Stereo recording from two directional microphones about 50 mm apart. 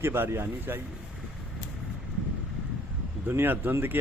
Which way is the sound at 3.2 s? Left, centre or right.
Right.